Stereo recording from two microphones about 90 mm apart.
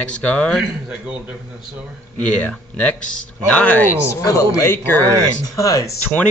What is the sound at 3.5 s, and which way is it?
Speech, 15° left (ahead or behind).